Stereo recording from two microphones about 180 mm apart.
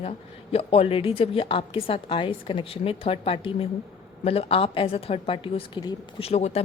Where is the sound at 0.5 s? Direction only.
35° left (ahead or behind).